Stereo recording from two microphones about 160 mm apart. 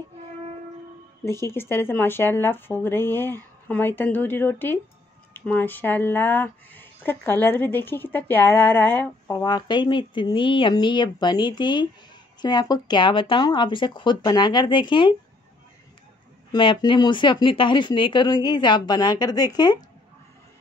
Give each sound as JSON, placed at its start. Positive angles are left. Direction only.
{"t": 1.2, "sound": "speech", "side_deg": 15}
{"t": 9.4, "sound": "speech", "side_deg": 25}
{"t": 16.5, "sound": "speech", "side_deg": 30}